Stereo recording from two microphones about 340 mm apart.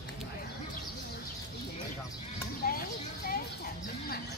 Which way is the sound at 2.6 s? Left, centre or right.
Left.